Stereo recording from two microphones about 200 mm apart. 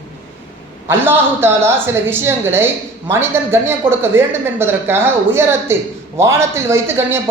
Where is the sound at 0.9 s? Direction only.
10° right (ahead or behind).